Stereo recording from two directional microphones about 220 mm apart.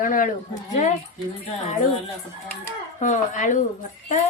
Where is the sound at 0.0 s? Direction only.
40° left (ahead or behind).